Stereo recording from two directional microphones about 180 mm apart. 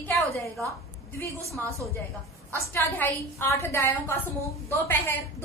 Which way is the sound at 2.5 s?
10° left (ahead or behind).